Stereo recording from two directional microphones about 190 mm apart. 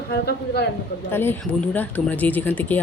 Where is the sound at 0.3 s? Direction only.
60° left (ahead or behind).